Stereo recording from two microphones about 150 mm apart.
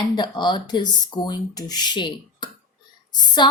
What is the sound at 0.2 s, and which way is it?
Speech, 30° left (ahead or behind).